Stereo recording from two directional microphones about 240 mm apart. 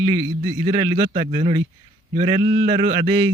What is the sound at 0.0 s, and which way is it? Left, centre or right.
Speech, centre.